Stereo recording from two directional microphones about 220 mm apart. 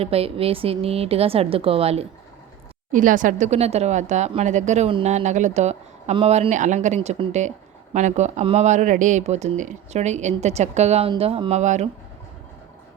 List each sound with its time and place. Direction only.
0.0 s a woman's voice: 25° right (ahead or behind)